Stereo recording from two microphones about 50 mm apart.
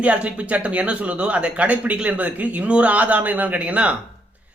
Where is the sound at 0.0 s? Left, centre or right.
Right.